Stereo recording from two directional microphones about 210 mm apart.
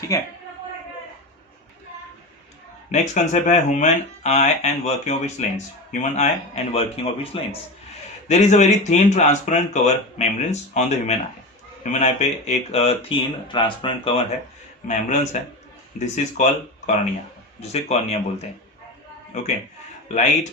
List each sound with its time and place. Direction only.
0.1 s a man's voice: 15° left (ahead or behind)
2.9 s speech: 35° left (ahead or behind)
14.8 s speech: 35° left (ahead or behind)
19.3 s speech: 35° left (ahead or behind)